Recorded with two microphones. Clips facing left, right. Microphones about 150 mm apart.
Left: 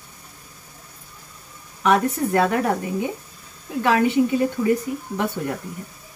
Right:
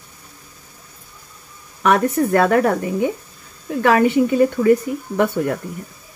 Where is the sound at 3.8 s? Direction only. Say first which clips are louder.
Right 4 dB; 60° right (ahead or behind).